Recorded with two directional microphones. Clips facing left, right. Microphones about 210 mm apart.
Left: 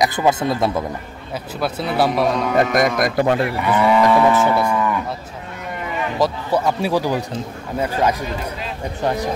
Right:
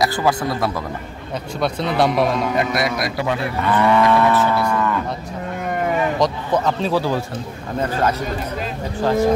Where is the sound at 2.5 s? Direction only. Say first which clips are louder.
Left 4 dB; 45° left (ahead or behind).